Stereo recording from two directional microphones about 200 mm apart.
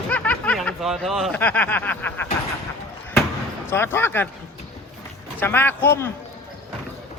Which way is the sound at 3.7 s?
10° left (ahead or behind).